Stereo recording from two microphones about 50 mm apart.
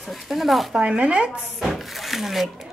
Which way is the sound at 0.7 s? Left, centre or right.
Right.